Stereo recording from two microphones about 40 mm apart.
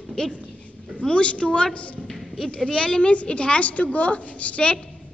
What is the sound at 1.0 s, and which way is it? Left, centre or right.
A woman's voice, left.